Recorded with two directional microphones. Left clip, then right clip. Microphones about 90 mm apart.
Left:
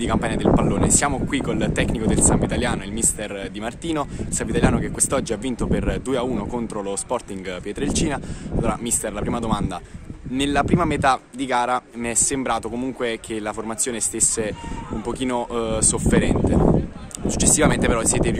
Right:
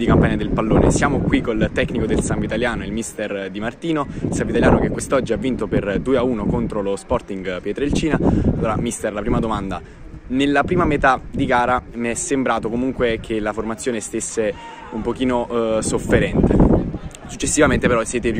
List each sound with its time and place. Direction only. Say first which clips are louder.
0.0 s speech: right 3 dB; 25° left (ahead or behind)
17.6 s speech: right 6 dB; 20° left (ahead or behind)